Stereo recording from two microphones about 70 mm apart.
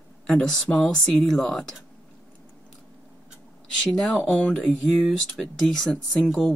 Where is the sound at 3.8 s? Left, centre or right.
Centre.